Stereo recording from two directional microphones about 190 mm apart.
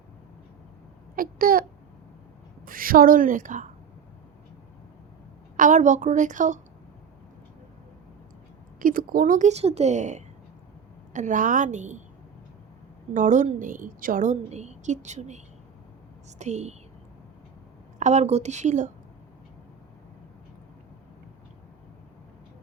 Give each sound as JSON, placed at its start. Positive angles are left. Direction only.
{"t": 1.1, "sound": "babbling", "side_deg": -50}
{"t": 2.6, "sound": "a woman's voice", "side_deg": -50}
{"t": 5.5, "sound": "a woman's voice", "side_deg": -40}
{"t": 8.8, "sound": "a woman's voice", "side_deg": -50}
{"t": 13.1, "sound": "a woman's voice", "side_deg": -40}
{"t": 16.4, "sound": "a woman's voice", "side_deg": -35}
{"t": 18.0, "sound": "a woman's voice", "side_deg": -35}